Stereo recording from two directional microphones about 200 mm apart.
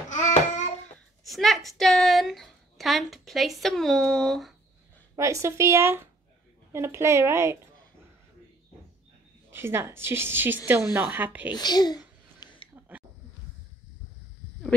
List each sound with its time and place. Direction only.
0.1 s babbling: 35° left (ahead or behind)
1.2 s a woman's voice: centre (ahead or behind)
5.1 s a woman's voice: 15° right (ahead or behind)
9.5 s a woman's voice: 10° right (ahead or behind)
11.5 s a sound: 20° left (ahead or behind)